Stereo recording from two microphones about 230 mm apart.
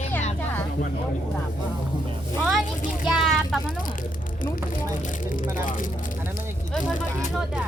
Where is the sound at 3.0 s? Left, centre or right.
Centre.